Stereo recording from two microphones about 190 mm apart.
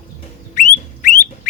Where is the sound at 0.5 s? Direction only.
40° left (ahead or behind).